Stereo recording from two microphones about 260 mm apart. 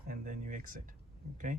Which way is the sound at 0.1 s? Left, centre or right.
Right.